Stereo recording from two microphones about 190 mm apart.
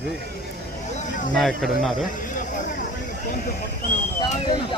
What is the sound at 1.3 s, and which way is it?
Speech, centre (ahead or behind).